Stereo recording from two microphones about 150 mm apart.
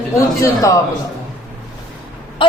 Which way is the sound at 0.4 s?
20° left (ahead or behind).